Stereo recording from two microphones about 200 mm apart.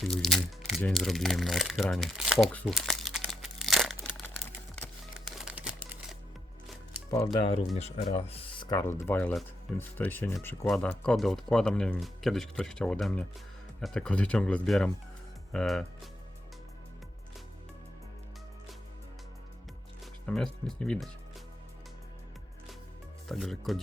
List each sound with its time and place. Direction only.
0.0 s crumpling: centre (ahead or behind)
5.2 s a sound: centre (ahead or behind)
7.4 s speech: 25° left (ahead or behind)
8.8 s speech: 15° left (ahead or behind)
20.2 s speech: 5° left (ahead or behind)
23.3 s speech: centre (ahead or behind)